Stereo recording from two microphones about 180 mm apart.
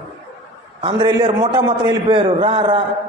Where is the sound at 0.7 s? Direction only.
25° right (ahead or behind).